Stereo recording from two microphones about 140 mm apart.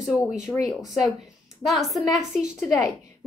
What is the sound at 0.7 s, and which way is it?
A woman's voice, centre (ahead or behind).